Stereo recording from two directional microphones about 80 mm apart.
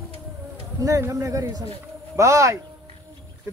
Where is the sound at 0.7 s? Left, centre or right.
Right.